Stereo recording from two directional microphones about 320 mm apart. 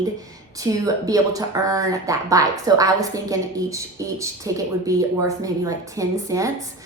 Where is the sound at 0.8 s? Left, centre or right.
Centre.